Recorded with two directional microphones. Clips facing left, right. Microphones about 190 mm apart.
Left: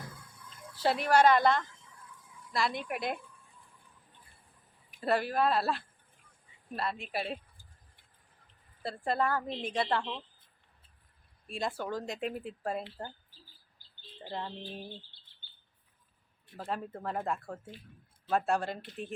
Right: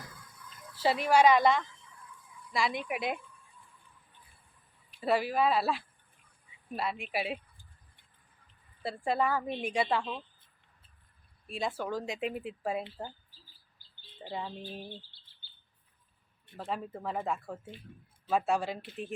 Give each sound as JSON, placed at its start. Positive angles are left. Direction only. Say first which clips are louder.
{"t": 0.3, "sound": "a sound", "louder": "left 1 dB", "side_deg": 30}
{"t": 0.8, "sound": "speech", "louder": "right 1 dB", "side_deg": -5}
{"t": 4.9, "sound": "a woman's voice", "louder": "right 1 dB", "side_deg": -5}
{"t": 9.0, "sound": "a woman's voice", "louder": "right 1 dB", "side_deg": -5}
{"t": 11.4, "sound": "speech", "louder": "right 1 dB", "side_deg": -5}
{"t": 14.2, "sound": "a woman's voice", "louder": "right 1 dB", "side_deg": -5}
{"t": 16.5, "sound": "speech", "louder": "even", "side_deg": 0}